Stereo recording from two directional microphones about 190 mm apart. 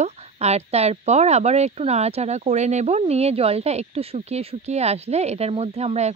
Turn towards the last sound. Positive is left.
turn(degrees=-35)  # may be behind; listen again after turning